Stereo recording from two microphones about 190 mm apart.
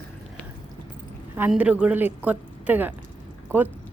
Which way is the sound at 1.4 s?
5° right (ahead or behind).